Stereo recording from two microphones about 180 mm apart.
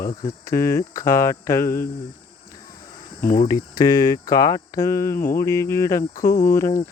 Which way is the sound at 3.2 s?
50° left (ahead or behind).